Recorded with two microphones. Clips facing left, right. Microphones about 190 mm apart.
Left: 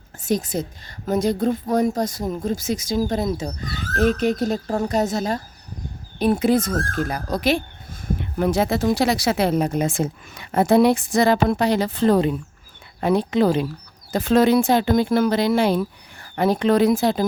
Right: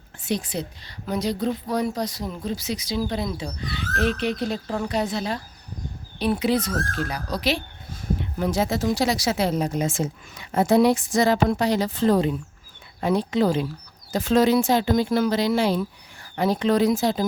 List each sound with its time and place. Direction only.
0.2 s a woman's voice: 45° left (ahead or behind)